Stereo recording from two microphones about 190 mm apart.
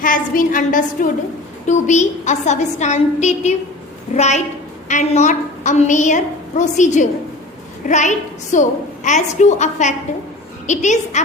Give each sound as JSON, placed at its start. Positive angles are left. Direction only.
{"t": 0.0, "sound": "a woman's voice", "side_deg": 45}